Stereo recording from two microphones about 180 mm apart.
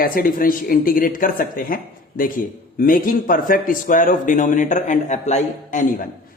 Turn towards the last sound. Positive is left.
turn(degrees=40)  # may be behind; listen again after turning